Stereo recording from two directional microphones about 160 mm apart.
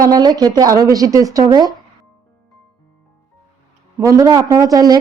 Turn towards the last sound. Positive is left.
turn(degrees=-25)  # may be behind; listen again after turning